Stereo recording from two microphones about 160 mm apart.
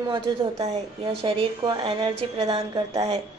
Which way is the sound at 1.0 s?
35° right (ahead or behind).